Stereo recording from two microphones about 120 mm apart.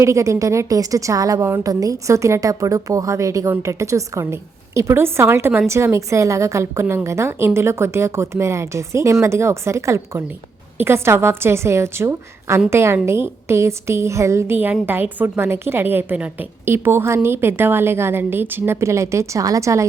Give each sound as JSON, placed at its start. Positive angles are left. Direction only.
{"t": 0.0, "sound": "a woman's voice", "side_deg": -25}